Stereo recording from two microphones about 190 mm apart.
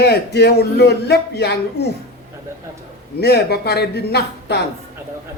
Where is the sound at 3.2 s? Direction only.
60° left (ahead or behind).